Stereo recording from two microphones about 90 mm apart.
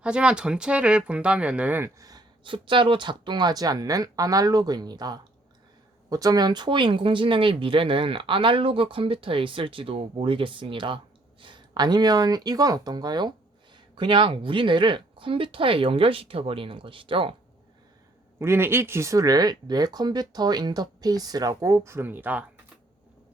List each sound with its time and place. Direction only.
0.0 s speech: 10° right (ahead or behind)
2.0 s speech: 45° right (ahead or behind)
2.4 s speech: 65° right (ahead or behind); by 13.3 s 50° right (ahead or behind)
13.9 s speech: 65° right (ahead or behind)
18.3 s speech: 25° right (ahead or behind)